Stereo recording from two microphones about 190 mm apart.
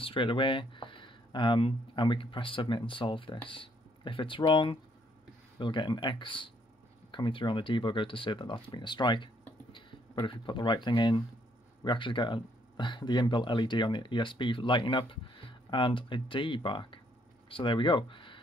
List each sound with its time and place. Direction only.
0.0 s speech: 25° left (ahead or behind)